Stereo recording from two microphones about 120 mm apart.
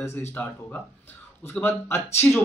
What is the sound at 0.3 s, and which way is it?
Speech, 15° left (ahead or behind).